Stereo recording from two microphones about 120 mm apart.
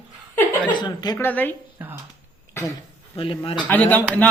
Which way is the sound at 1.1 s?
15° left (ahead or behind).